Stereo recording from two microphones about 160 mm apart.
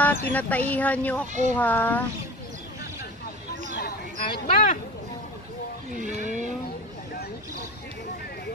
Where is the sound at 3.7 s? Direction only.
80° left.